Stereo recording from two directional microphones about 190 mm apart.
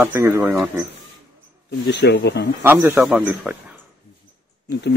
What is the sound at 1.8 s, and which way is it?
Speech, 65° left (ahead or behind).